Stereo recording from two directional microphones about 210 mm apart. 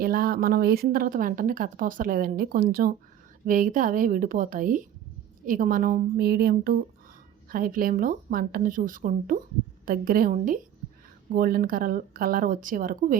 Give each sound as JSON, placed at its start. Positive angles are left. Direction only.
{"t": 0.0, "sound": "a woman's voice", "side_deg": -45}